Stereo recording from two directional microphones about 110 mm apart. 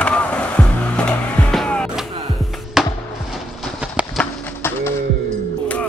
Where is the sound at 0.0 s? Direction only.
10° left (ahead or behind).